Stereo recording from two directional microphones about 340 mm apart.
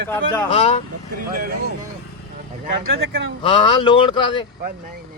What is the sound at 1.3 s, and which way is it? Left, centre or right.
Speech, right.